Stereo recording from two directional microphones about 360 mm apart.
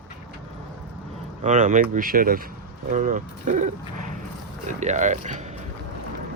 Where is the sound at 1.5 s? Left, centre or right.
Centre.